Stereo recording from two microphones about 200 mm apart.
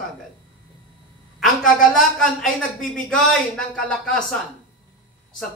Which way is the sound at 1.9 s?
Centre (ahead or behind).